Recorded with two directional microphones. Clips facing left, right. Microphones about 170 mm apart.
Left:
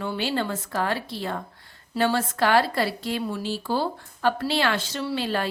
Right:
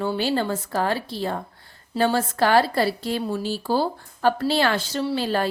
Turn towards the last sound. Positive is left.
turn(degrees=-40)  # may be behind; listen again after turning